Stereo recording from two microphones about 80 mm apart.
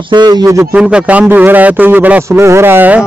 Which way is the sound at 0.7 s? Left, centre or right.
Centre.